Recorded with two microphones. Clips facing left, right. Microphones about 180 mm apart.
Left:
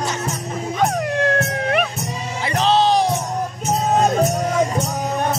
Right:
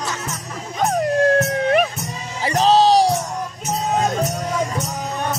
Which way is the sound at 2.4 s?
40° right (ahead or behind).